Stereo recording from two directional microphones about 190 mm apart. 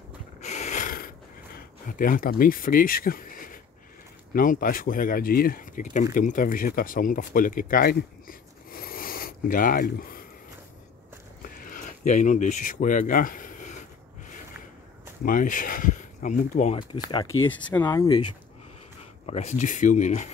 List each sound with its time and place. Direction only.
0.4 s a sound: 35° left (ahead or behind)
2.0 s speech: 45° left (ahead or behind)
11.4 s a sound: 45° left (ahead or behind)
15.2 s speech: 45° left (ahead or behind)
17.5 s speech: 10° left (ahead or behind)
17.8 s speech: 20° left (ahead or behind)
19.2 s speech: 35° left (ahead or behind)